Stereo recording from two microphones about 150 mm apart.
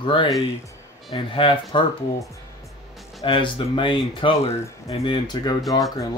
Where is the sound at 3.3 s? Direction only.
35° left (ahead or behind).